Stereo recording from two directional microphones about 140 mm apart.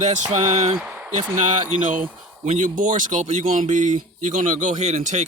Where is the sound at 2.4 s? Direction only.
65° right (ahead or behind).